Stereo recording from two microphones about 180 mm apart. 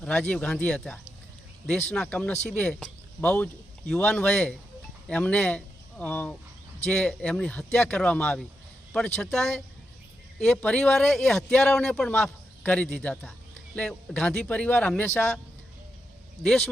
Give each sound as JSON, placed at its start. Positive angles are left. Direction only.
{"t": 0.0, "sound": "speech", "side_deg": 5}
{"t": 16.4, "sound": "speech", "side_deg": 0}